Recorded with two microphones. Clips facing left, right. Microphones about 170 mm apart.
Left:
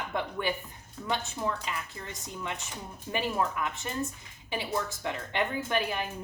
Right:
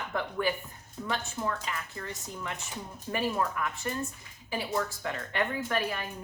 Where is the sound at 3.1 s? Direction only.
15° left (ahead or behind).